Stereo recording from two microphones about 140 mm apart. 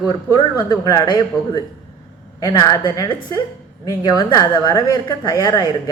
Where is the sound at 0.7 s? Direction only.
25° left (ahead or behind).